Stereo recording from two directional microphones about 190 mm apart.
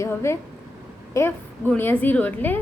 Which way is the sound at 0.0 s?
15° left (ahead or behind).